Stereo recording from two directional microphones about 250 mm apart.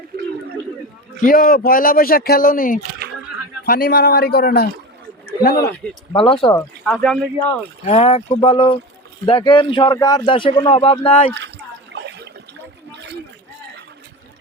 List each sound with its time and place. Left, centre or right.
1.2 s speech: left
6.1 s a man's voice: left
6.8 s speech: centre
7.9 s a man's voice: left
11.9 s water: right